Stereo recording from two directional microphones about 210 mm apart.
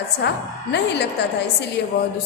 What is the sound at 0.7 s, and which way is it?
A woman's voice, 55° left (ahead or behind).